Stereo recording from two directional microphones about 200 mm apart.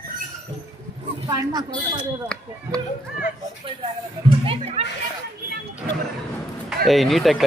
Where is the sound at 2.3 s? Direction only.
5° left (ahead or behind).